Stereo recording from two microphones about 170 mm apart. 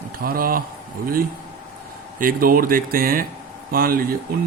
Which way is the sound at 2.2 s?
55° right (ahead or behind).